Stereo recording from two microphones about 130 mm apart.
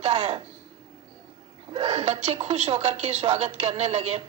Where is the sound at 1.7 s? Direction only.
50° right (ahead or behind).